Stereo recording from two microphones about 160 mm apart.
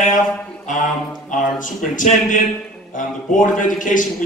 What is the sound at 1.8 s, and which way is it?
A man's voice, 55° left (ahead or behind).